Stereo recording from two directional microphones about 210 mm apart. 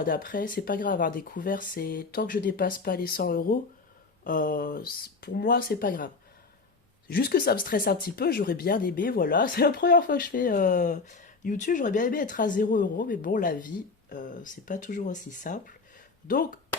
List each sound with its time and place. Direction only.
0.0 s speech: 40° left (ahead or behind)
7.1 s speech: 45° left (ahead or behind)